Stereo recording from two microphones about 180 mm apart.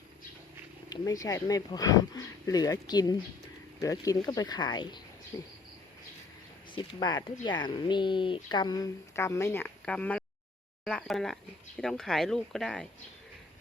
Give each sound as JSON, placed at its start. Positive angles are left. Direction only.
{"t": 0.9, "sound": "speech", "side_deg": 20}
{"t": 6.7, "sound": "speech", "side_deg": 25}